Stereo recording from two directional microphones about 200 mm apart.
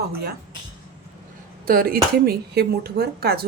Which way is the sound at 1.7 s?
45° right (ahead or behind).